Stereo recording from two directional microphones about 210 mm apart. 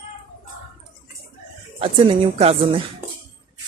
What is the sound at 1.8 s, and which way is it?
A woman's voice, 30° right (ahead or behind).